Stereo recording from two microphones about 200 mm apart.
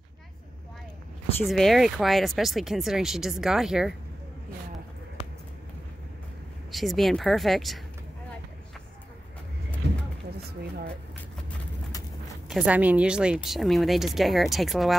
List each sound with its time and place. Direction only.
1.4 s speech: centre (ahead or behind)
6.7 s speech: centre (ahead or behind)
12.4 s speech: 5° right (ahead or behind)